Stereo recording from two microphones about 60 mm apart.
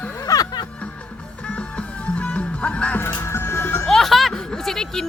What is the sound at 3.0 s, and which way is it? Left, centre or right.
Music, left.